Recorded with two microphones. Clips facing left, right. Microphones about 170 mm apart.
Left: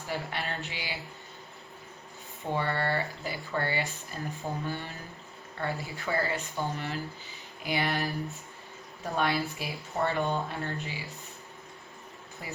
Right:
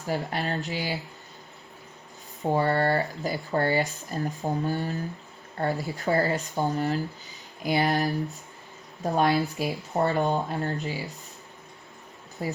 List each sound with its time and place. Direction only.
0.0 s speech: 40° right (ahead or behind)
2.4 s speech: 40° right (ahead or behind)
12.4 s speech: 35° right (ahead or behind)